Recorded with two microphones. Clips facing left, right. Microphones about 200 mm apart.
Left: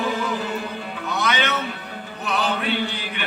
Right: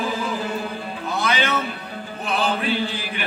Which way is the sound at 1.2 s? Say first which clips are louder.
Right 1 dB; 30° right (ahead or behind).